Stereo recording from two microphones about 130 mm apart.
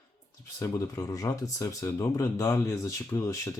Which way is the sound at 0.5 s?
25° left (ahead or behind).